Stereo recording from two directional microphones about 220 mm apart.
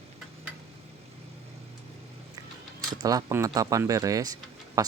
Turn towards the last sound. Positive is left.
turn(degrees=-15)  # may be behind; listen again after turning